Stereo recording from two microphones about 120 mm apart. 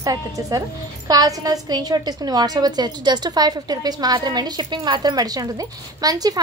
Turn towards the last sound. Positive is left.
turn(degrees=-30)  # may be behind; listen again after turning